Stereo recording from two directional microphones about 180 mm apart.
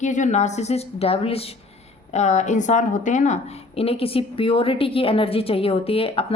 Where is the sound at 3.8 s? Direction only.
30° left (ahead or behind).